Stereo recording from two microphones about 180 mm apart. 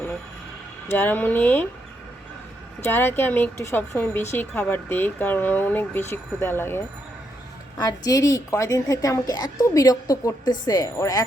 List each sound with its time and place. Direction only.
0.9 s speech: 10° left (ahead or behind)
2.8 s a woman's voice: 10° left (ahead or behind)